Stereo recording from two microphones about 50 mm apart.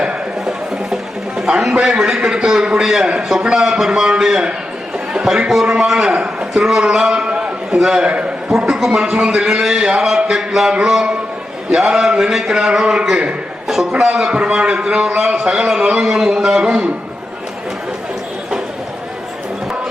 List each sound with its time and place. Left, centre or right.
0.0 s a sound: centre
1.8 s a man's voice: centre
6.0 s a man's voice: centre